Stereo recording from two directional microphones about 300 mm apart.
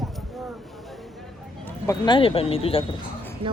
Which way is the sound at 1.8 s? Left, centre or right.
Centre.